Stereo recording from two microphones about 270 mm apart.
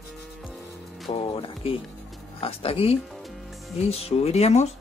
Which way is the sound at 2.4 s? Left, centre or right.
Left.